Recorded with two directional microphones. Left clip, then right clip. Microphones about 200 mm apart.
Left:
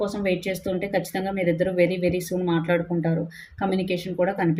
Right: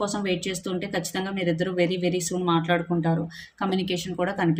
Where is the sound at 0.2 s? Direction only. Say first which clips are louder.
Left 3 dB; 15° right (ahead or behind).